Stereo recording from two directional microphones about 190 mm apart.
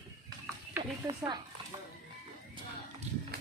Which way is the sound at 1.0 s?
20° right (ahead or behind).